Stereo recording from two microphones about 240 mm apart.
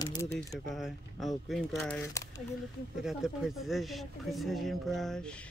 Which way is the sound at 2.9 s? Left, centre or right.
Centre.